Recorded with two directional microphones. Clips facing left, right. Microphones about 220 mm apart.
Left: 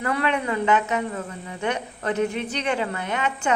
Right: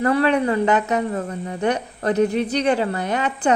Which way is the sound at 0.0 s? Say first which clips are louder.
Right 7 dB; 35° right (ahead or behind).